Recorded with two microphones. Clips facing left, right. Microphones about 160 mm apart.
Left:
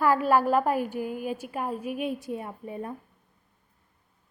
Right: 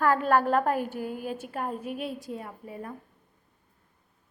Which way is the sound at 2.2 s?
25° left (ahead or behind).